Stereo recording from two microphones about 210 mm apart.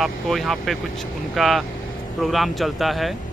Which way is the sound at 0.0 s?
Centre (ahead or behind).